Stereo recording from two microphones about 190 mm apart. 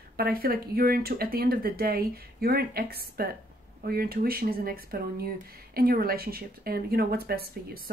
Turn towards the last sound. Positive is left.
turn(degrees=-55)  # may be behind; listen again after turning